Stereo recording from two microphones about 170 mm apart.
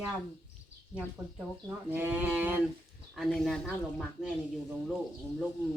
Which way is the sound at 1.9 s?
10° right (ahead or behind).